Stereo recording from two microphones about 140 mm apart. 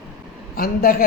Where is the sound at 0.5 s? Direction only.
90° left.